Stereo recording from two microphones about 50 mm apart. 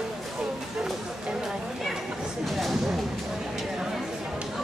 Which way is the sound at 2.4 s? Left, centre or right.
Centre.